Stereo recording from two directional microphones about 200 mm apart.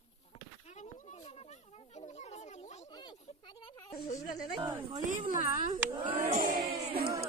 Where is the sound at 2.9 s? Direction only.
20° left (ahead or behind).